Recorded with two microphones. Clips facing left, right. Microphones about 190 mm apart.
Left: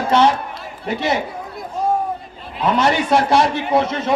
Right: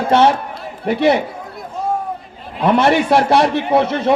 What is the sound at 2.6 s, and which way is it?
A man's voice, 60° right (ahead or behind).